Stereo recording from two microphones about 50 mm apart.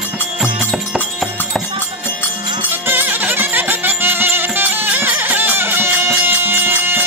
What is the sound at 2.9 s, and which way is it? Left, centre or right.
Music, right.